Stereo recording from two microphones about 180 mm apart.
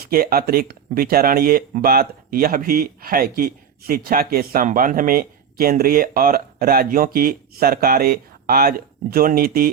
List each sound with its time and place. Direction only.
0.0 s speech: 55° right (ahead or behind)